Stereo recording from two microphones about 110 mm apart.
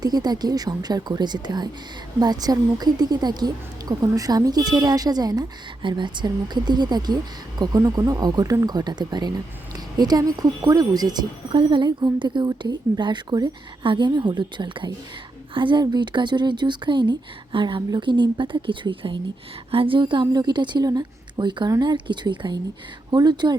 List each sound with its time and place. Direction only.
0.0 s a woman's voice: 35° right (ahead or behind)